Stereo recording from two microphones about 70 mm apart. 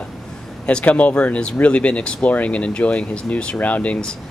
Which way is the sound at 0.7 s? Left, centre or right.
Centre.